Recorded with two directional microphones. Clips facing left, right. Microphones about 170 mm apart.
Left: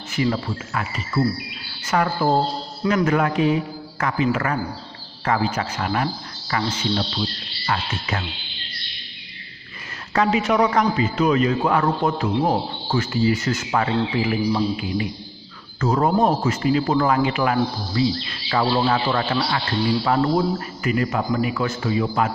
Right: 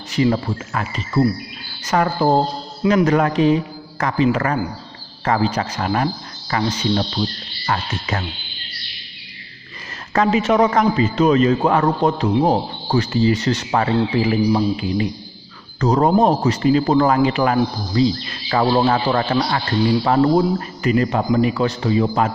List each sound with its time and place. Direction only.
0.1 s speech: 35° right (ahead or behind)
1.9 s speech: 40° right (ahead or behind)
10.1 s a man's voice: 45° right (ahead or behind)